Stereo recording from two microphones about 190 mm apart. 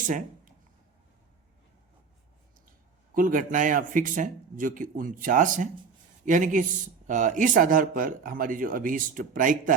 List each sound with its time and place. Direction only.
3.2 s speech: 45° right (ahead or behind)